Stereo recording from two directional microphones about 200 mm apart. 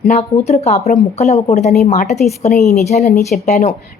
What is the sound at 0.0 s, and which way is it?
A woman's voice, 35° left (ahead or behind).